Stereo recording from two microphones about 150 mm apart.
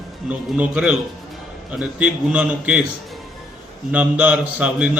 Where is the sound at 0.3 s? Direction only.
5° right (ahead or behind).